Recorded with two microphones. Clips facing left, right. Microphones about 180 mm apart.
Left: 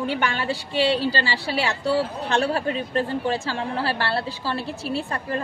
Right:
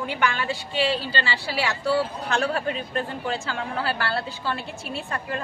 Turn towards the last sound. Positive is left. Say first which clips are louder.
# left 3 dB
turn(degrees=35)  # may be behind; listen again after turning